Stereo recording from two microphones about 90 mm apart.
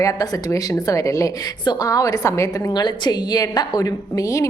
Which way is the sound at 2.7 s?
55° left (ahead or behind).